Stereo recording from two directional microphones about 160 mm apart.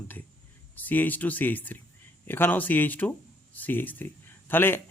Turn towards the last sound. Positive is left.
turn(degrees=15)  # may be behind; listen again after turning